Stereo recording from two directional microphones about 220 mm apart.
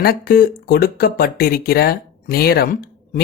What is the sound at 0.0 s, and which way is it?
Speech, 45° left (ahead or behind).